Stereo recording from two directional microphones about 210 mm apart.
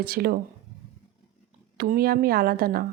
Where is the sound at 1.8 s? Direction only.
45° right (ahead or behind).